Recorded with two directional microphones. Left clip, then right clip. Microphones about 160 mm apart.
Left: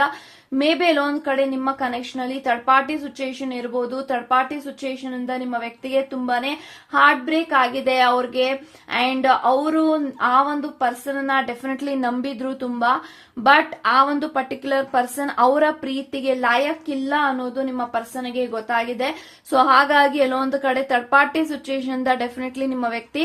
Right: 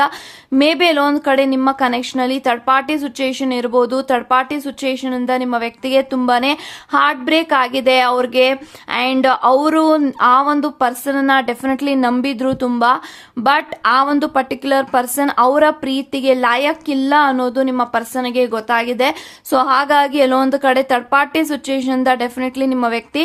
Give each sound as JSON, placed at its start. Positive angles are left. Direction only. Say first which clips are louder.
{"t": 0.5, "sound": "a woman's voice", "louder": "right 5 dB", "side_deg": -40}